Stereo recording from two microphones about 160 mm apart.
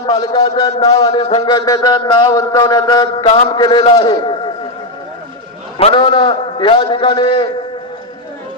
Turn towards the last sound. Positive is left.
turn(degrees=35)  # may be behind; listen again after turning